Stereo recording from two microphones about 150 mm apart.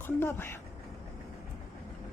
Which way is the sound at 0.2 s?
15° left (ahead or behind).